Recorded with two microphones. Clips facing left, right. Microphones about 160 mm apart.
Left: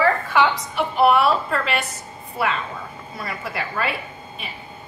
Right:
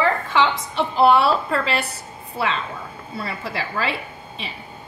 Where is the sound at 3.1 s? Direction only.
30° right (ahead or behind).